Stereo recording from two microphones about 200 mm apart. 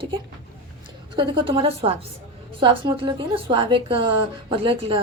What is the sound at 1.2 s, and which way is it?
A woman's voice, 25° right (ahead or behind).